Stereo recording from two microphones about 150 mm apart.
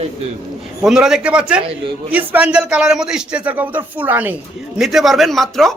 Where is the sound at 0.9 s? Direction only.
5° right (ahead or behind).